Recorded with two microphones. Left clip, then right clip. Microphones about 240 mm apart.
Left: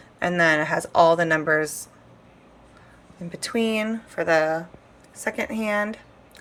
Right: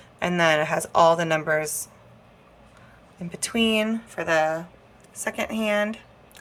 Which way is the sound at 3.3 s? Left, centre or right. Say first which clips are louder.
Right 1 dB; centre.